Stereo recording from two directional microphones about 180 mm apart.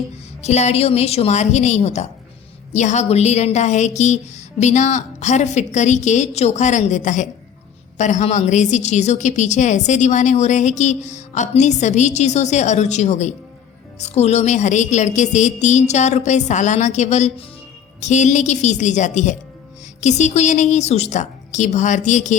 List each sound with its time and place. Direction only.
0.4 s a woman's voice: 40° left (ahead or behind)